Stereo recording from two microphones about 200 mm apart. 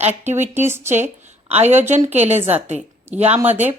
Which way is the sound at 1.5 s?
35° right (ahead or behind).